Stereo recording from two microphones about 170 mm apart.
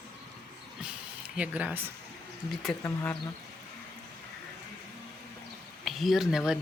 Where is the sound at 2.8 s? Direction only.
10° left (ahead or behind).